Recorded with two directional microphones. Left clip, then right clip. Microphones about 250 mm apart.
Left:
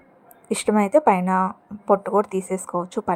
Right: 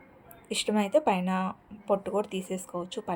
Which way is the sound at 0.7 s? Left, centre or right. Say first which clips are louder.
Left 8 dB; left.